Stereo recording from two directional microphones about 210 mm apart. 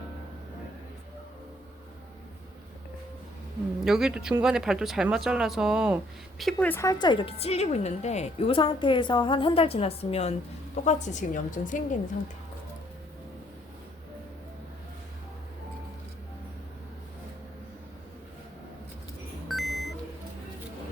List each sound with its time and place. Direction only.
3.8 s speech: centre (ahead or behind)
6.4 s a woman's voice: 5° left (ahead or behind); by 11.8 s 40° left (ahead or behind)
19.5 s beep: centre (ahead or behind)